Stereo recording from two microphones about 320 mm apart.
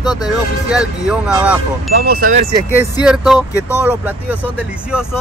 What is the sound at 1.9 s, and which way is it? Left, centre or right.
Speech, right.